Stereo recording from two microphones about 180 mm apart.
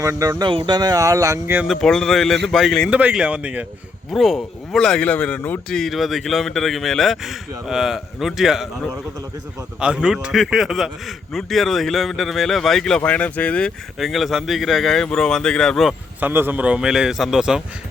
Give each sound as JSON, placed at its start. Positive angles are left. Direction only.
{"t": 0.0, "sound": "speech", "side_deg": -20}
{"t": 1.6, "sound": "a man's voice", "side_deg": 0}
{"t": 9.8, "sound": "a man's voice", "side_deg": -5}